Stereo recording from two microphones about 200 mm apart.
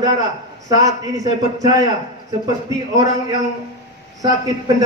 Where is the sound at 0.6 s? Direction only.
15° right (ahead or behind).